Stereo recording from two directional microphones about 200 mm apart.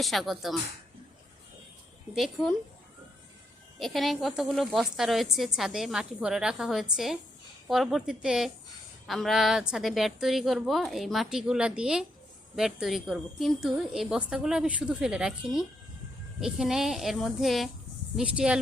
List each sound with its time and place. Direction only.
0.0 s a woman's voice: centre (ahead or behind)
2.1 s a woman's voice: centre (ahead or behind)
3.8 s a woman's voice: centre (ahead or behind)